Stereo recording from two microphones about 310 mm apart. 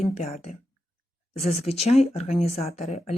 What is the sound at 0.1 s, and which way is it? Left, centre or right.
Speech, centre.